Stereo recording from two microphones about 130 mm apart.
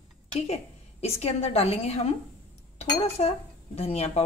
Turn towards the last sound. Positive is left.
turn(degrees=55)  # may be behind; listen again after turning